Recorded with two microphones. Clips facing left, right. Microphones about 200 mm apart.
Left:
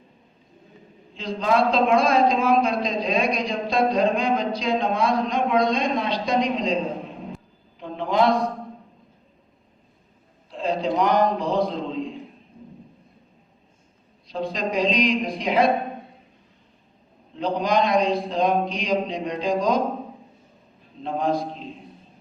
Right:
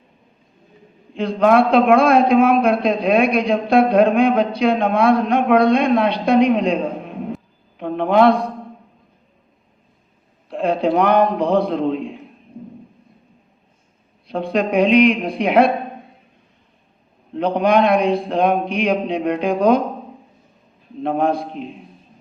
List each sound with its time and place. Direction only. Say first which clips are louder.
1.1 s a man's voice: right 8 dB; 60° right (ahead or behind)
7.8 s a sound: right 7 dB; 60° right (ahead or behind)
10.5 s a man's voice: right 6 dB; 60° right (ahead or behind)
14.3 s a man's voice: right 7 dB; 60° right (ahead or behind)
17.3 s a man's voice: right 6 dB; 60° right (ahead or behind)
21.0 s a man's voice: right 5 dB; 60° right (ahead or behind)